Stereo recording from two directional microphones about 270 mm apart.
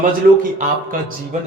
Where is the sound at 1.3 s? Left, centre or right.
Right.